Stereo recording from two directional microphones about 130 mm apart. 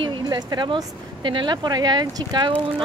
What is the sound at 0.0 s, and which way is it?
Speech, 35° right (ahead or behind).